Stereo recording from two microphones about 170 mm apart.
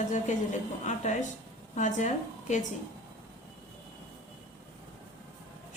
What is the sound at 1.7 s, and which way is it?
Speech, 45° left (ahead or behind).